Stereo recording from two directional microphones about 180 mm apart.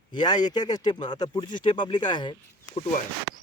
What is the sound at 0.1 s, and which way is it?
Speech, 25° left (ahead or behind).